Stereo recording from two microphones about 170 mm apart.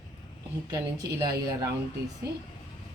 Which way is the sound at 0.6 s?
20° right (ahead or behind).